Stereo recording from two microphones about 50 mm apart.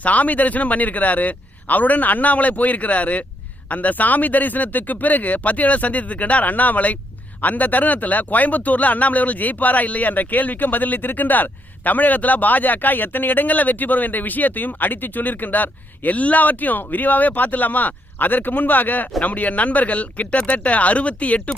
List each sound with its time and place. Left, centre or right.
0.0 s speech: left